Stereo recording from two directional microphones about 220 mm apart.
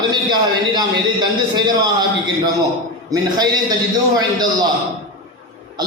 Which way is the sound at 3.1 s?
20° right (ahead or behind).